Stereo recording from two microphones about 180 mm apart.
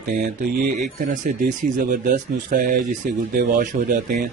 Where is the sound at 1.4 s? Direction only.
50° right (ahead or behind).